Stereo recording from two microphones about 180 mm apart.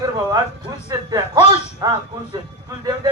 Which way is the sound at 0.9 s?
20° right (ahead or behind).